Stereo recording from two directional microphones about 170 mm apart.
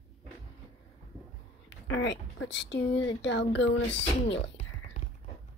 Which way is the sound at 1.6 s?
90° left.